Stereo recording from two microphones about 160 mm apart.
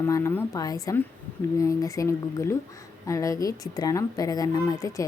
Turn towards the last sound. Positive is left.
turn(degrees=20)  # may be behind; listen again after turning